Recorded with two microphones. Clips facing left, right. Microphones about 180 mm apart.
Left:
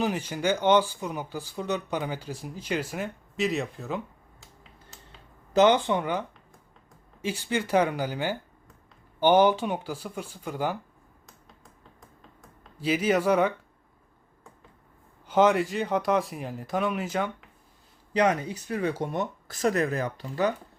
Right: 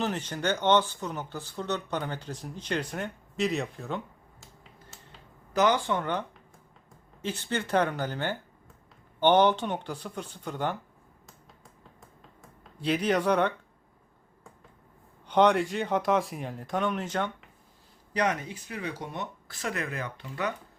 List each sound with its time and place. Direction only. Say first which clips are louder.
0.0 s speech: left 3 dB; 10° left (ahead or behind)
5.5 s speech: left 4 dB; 25° left (ahead or behind); by 10.8 s 5° left (ahead or behind)
11.9 s finger snapping: left 1 dB; centre (ahead or behind)
15.3 s speech: left 1 dB; 5° left (ahead or behind)
18.1 s speech: left 5 dB; 30° left (ahead or behind)